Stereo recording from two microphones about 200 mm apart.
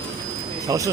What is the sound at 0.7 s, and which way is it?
Speech, 20° right (ahead or behind).